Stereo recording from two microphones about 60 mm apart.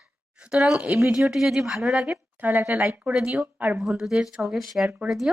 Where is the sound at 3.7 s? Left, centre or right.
Centre.